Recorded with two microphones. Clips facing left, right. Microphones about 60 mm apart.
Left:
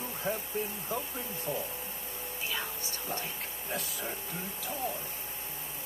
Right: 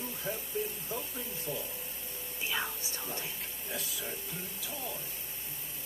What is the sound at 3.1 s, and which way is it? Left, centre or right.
Speech, left.